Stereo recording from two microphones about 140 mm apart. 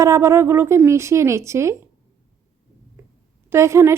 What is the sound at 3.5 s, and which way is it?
Speech, 20° right (ahead or behind).